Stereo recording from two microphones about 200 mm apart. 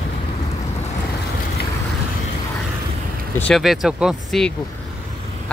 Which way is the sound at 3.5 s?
Centre (ahead or behind).